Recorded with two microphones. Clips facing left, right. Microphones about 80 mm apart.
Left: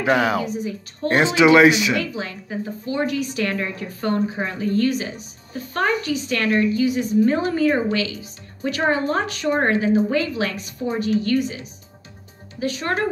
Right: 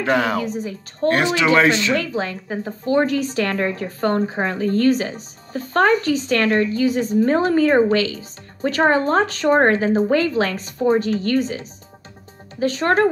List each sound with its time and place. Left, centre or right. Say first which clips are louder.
0.0 s speech: even; centre
0.5 s a woman's voice: even; right
1.0 s speech: left 1 dB; left
2.0 s a woman's voice: right 3 dB; right